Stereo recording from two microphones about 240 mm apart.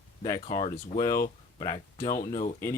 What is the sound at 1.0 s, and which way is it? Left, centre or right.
Speech, centre.